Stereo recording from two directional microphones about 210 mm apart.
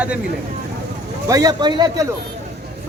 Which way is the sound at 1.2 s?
15° right (ahead or behind).